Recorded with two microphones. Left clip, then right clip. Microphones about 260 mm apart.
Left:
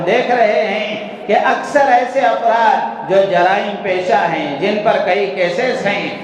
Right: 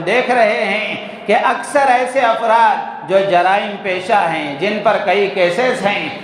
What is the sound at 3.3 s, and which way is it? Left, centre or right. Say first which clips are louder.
Carnatic music: even; right.